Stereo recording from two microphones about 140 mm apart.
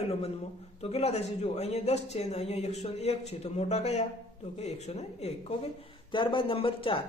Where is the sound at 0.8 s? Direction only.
50° left (ahead or behind).